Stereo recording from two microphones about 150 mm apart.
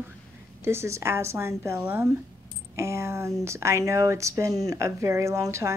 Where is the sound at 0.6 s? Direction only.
15° right (ahead or behind).